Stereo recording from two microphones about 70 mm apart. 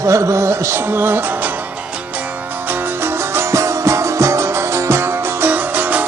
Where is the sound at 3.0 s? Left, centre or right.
Right.